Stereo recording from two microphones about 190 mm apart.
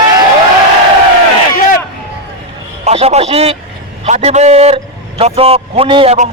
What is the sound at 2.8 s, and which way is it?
A man's voice, 35° right (ahead or behind).